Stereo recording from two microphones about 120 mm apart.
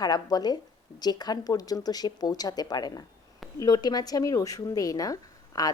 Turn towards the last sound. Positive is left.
turn(degrees=30)  # may be behind; listen again after turning